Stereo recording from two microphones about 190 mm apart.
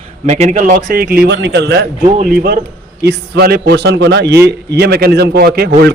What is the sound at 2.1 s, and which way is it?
A man's voice, 50° right (ahead or behind).